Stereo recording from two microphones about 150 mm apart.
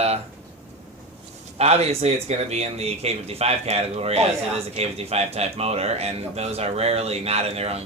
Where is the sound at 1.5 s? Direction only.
45° right (ahead or behind).